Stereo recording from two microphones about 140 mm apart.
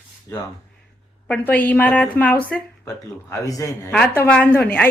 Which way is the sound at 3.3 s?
25° left (ahead or behind).